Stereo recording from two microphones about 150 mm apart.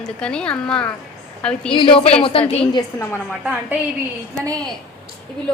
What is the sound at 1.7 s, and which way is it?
A woman's voice, 35° left (ahead or behind).